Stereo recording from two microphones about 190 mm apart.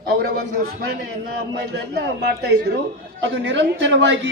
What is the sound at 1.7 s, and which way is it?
A man's voice, 60° right (ahead or behind).